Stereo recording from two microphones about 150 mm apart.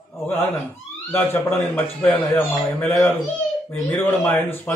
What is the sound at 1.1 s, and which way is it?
Speech, 15° left (ahead or behind).